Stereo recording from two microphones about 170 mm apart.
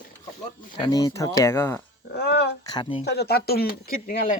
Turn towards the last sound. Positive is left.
turn(degrees=55)  # may be behind; listen again after turning